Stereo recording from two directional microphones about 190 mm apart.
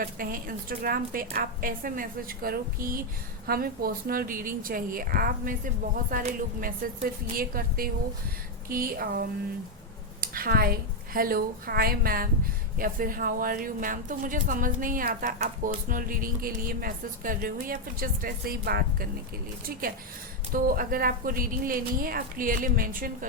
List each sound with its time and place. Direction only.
0.0 s speech: 50° right (ahead or behind)
20.5 s speech: 50° right (ahead or behind)